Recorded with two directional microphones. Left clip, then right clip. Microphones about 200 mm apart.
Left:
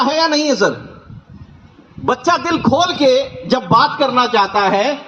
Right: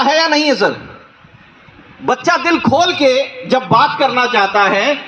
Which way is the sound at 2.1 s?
65° left (ahead or behind).